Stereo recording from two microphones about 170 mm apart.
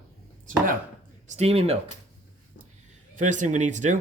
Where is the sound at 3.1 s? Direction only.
45° right (ahead or behind).